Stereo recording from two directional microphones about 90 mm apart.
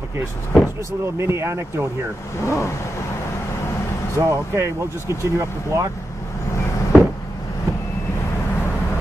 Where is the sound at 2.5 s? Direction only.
30° left (ahead or behind).